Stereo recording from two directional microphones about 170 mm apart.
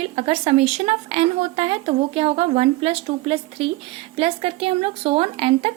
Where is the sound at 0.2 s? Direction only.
35° right (ahead or behind).